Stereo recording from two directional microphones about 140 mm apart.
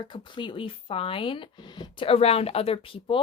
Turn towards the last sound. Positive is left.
turn(degrees=40)  # may be behind; listen again after turning